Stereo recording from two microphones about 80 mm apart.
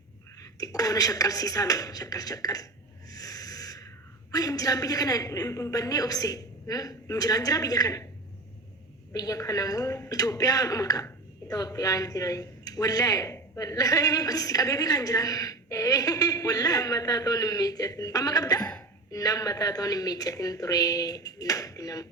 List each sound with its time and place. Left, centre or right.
0.6 s a woman's voice: left
3.1 s a sound: left
4.3 s a woman's voice: left
9.1 s a woman's voice: left